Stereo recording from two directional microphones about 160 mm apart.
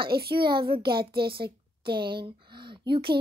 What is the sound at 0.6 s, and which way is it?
A woman's voice, 35° right (ahead or behind).